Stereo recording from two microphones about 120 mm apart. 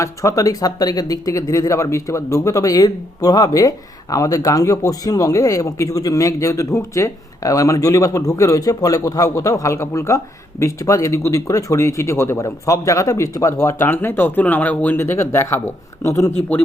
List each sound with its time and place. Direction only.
0.0 s speech: 25° left (ahead or behind)